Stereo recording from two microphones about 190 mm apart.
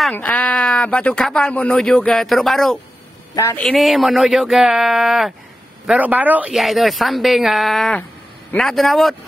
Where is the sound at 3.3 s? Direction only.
15° left (ahead or behind).